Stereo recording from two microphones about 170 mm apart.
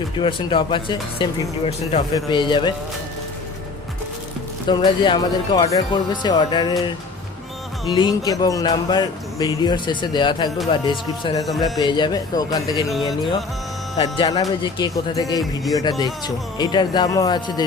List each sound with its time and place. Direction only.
0.2 s speech: 30° left (ahead or behind)
4.7 s speech: 25° left (ahead or behind)
7.9 s speech: 25° left (ahead or behind)
13.9 s speech: 30° left (ahead or behind)